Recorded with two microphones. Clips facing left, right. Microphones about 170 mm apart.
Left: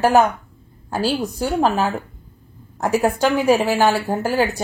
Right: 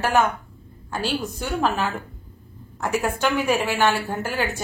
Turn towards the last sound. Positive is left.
turn(degrees=35)  # may be behind; listen again after turning